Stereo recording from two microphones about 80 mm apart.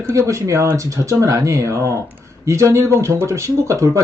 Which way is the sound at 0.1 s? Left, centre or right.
Right.